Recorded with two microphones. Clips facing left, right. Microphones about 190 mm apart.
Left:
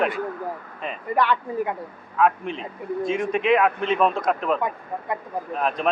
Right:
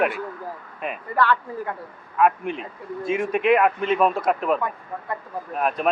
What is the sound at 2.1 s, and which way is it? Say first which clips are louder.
Speech: right 1 dB; 5° right (ahead or behind).